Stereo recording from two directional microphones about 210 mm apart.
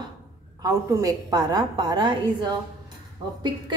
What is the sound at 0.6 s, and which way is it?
A woman's voice, 15° right (ahead or behind).